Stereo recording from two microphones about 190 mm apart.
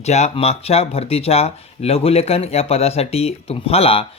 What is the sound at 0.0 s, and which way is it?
Speech, 35° left (ahead or behind).